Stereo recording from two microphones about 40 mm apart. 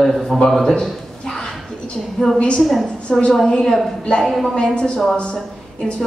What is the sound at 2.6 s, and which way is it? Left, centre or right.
Speech, centre.